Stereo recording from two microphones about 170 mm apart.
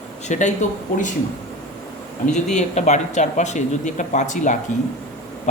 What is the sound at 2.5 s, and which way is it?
Speech, 45° left (ahead or behind).